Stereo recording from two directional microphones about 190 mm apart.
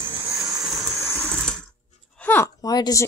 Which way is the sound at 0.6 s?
Centre (ahead or behind).